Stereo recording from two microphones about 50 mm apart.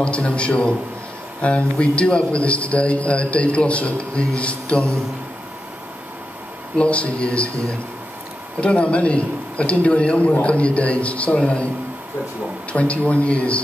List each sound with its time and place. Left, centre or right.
0.0 s a man's voice: left
6.8 s a man's voice: left
12.7 s a man's voice: left